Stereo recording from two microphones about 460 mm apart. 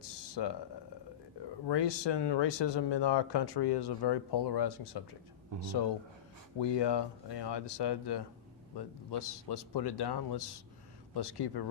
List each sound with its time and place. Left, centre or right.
0.0 s a sound: left
1.6 s speech: left
6.6 s speech: left